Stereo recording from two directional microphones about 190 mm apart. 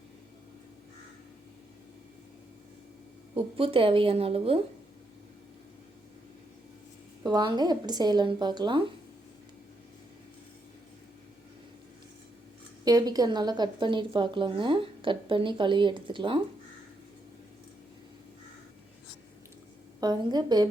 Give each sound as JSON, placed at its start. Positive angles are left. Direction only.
{"t": 3.3, "sound": "a woman's voice", "side_deg": -30}
{"t": 7.3, "sound": "a woman's voice", "side_deg": -20}
{"t": 12.8, "sound": "a woman's voice", "side_deg": -20}
{"t": 20.0, "sound": "a woman's voice", "side_deg": -20}